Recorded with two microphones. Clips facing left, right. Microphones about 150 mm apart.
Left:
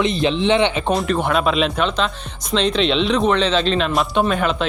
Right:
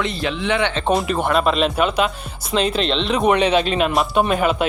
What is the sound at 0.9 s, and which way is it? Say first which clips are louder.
Speech: even; 5° right (ahead or behind).